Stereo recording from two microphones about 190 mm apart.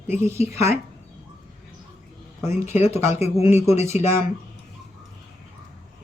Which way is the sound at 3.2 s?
35° left (ahead or behind).